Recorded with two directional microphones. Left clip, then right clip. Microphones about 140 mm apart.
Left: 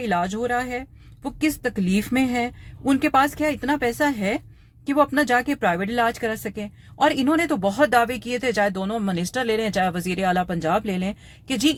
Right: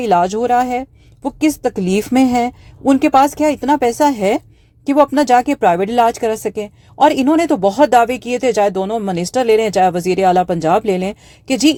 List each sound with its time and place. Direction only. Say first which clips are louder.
0.0 s speech: right 10 dB; 35° right (ahead or behind)
2.8 s speech: right 8 dB; 25° right (ahead or behind)